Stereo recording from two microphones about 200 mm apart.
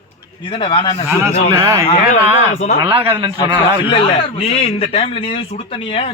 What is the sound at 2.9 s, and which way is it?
Speech, 10° right (ahead or behind).